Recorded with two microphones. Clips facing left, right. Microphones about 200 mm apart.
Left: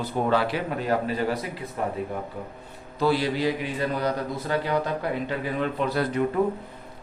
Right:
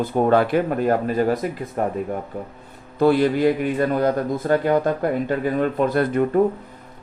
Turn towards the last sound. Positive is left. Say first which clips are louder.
# right 6 dB
turn(degrees=-50)  # may be behind; listen again after turning